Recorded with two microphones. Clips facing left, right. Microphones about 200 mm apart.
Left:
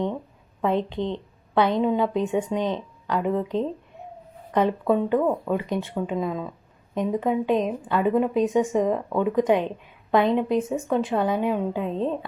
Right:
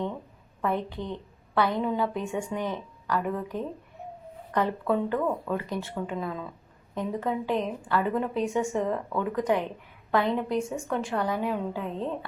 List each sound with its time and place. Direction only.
0.6 s speech: 20° left (ahead or behind)